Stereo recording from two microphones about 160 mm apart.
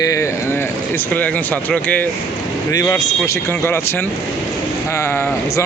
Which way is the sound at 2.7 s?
20° left (ahead or behind).